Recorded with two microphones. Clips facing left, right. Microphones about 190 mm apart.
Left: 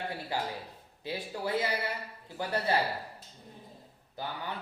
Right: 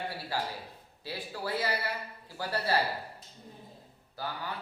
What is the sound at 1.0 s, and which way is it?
A man's voice, 20° left (ahead or behind).